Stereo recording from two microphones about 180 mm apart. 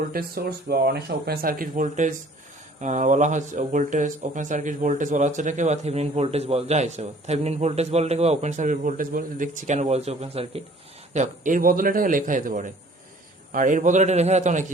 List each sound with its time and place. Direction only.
0.1 s a man's voice: 55° right (ahead or behind)